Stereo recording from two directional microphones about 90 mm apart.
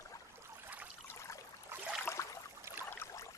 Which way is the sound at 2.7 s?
30° right (ahead or behind).